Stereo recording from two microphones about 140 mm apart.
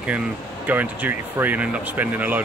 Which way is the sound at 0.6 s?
10° right (ahead or behind).